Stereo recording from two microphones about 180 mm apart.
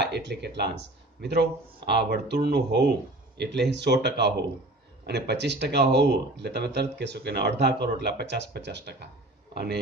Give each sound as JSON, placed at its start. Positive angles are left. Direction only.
{"t": 0.0, "sound": "speech", "side_deg": -70}